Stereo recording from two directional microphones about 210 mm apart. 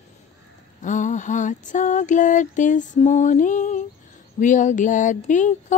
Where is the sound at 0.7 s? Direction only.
35° left (ahead or behind).